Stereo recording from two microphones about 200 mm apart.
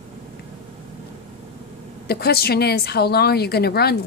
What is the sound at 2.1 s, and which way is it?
A woman's voice, 50° left (ahead or behind).